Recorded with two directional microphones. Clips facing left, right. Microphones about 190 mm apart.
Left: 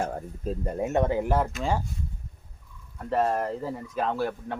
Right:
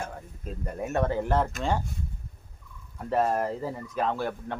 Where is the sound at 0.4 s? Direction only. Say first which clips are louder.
Left 5 dB; 30° left (ahead or behind); by 1.5 s 10° left (ahead or behind).